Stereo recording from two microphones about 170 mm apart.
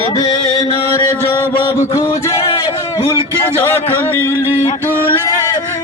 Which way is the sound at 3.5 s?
10° left (ahead or behind).